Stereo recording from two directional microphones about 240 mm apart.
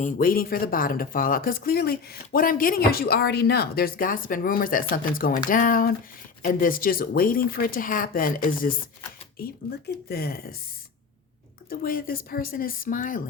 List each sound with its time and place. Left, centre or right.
0.0 s speech: left
11.7 s speech: left